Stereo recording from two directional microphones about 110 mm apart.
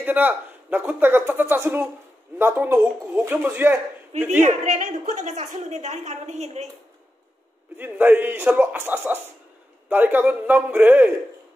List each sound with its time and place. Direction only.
0.0 s speech: 15° right (ahead or behind)
4.4 s a woman's voice: 90° right
7.7 s speech: 20° right (ahead or behind)